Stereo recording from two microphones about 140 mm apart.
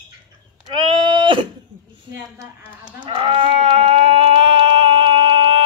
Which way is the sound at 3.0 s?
35° right (ahead or behind).